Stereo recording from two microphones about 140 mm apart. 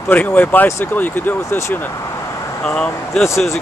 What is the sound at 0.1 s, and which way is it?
Speech, 10° left (ahead or behind).